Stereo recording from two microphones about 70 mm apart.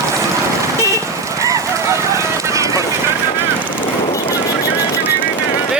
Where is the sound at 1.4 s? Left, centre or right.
Right.